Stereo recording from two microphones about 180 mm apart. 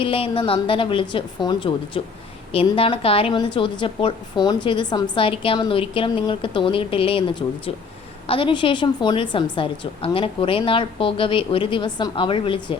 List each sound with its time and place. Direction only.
0.0 s a woman's voice: 30° left (ahead or behind)